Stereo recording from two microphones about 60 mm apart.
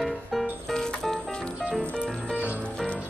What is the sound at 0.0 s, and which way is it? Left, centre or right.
Music, centre.